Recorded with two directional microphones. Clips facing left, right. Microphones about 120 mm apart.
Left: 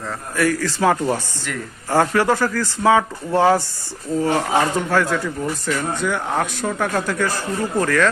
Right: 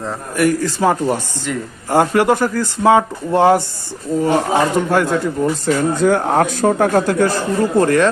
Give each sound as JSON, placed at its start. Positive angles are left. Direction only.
{"t": 0.0, "sound": "speech", "side_deg": -20}
{"t": 5.9, "sound": "speech", "side_deg": -40}